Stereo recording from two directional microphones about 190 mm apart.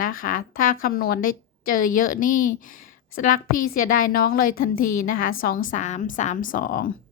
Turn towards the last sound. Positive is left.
turn(degrees=45)  # may be behind; listen again after turning